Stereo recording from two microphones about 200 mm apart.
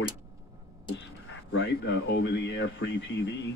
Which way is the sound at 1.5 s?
60° left (ahead or behind).